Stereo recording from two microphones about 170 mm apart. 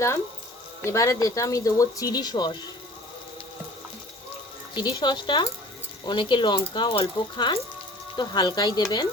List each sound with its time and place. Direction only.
0.9 s speech: 20° left (ahead or behind)
4.7 s speech: 25° left (ahead or behind)